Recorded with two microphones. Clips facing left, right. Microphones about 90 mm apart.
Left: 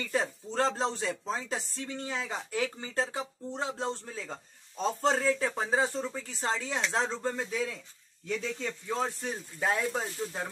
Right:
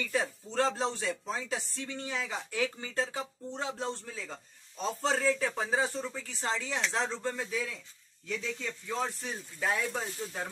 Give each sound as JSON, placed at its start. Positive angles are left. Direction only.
{"t": 0.0, "sound": "speech", "side_deg": 35}
{"t": 8.8, "sound": "speech", "side_deg": 25}
{"t": 10.0, "sound": "speech", "side_deg": 5}